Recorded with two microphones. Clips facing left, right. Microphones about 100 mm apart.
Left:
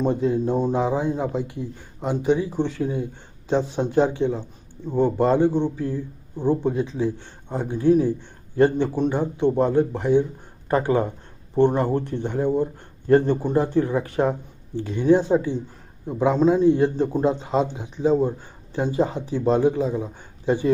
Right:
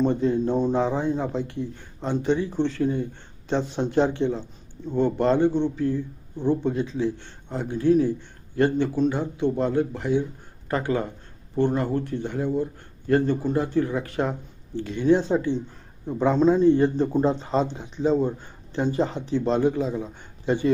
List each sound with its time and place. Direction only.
0.0 s a man's voice: 5° left (ahead or behind)